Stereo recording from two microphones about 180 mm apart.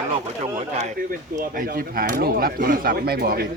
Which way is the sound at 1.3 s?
50° right (ahead or behind).